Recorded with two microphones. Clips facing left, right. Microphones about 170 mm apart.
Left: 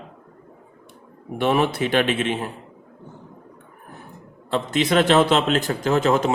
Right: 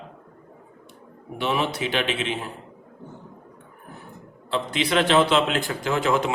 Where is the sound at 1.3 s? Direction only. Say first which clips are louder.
Left 5 dB; 50° left (ahead or behind).